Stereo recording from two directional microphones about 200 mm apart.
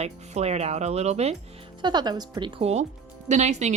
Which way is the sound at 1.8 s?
20° right (ahead or behind).